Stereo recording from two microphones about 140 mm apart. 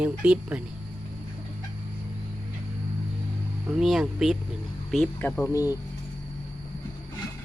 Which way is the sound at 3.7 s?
Centre (ahead or behind).